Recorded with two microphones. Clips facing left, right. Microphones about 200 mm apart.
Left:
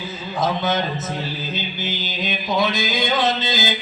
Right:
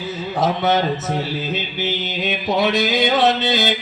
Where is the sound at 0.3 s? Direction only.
70° right (ahead or behind).